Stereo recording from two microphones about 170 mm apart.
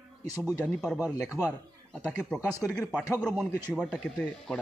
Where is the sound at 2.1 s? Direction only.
5° left (ahead or behind).